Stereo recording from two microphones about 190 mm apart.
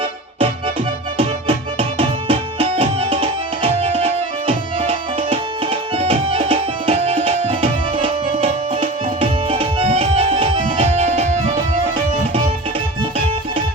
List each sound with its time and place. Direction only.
1.2 s music: 30° right (ahead or behind)
4.0 s tabla: 25° right (ahead or behind)
13.0 s music: 25° right (ahead or behind)